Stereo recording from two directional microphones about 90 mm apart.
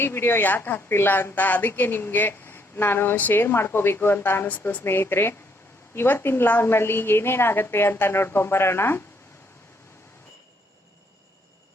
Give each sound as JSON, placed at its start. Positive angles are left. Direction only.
{"t": 0.0, "sound": "a woman's voice", "side_deg": 25}